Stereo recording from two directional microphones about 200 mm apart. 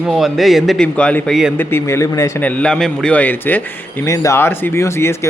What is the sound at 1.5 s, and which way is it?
Speech, 10° left (ahead or behind).